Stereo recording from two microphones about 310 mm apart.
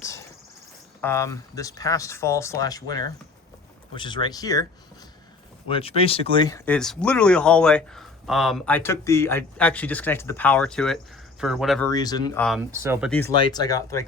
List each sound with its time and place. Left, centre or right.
0.0 s cricket: centre
1.0 s speech: centre
5.6 s speech: centre
11.9 s speech: centre
12.7 s speech: centre
13.1 s speech: centre